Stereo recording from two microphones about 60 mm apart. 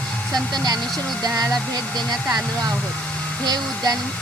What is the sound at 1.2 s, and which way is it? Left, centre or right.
Speech, right.